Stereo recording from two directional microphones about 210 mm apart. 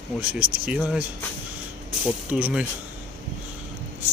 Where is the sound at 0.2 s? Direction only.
5° right (ahead or behind).